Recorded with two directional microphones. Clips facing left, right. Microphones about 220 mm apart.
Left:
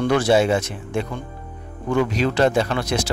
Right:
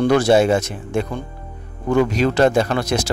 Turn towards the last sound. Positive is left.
turn(degrees=-45)  # may be behind; listen again after turning